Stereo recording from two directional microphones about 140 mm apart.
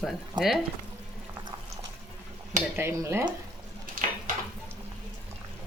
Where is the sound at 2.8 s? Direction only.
20° right (ahead or behind).